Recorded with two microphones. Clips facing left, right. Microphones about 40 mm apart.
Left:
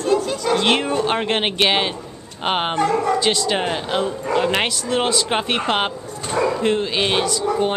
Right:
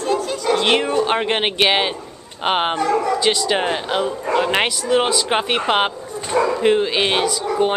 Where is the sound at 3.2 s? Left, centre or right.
Centre.